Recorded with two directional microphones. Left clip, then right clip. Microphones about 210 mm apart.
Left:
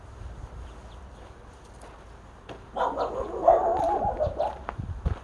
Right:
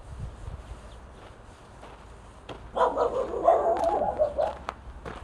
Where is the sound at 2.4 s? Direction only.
20° right (ahead or behind).